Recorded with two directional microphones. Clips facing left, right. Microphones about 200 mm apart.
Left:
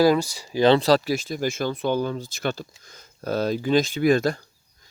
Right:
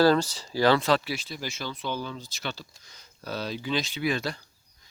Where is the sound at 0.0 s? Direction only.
10° left (ahead or behind).